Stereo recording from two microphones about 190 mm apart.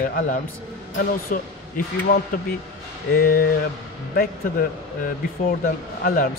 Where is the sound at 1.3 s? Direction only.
45° left (ahead or behind).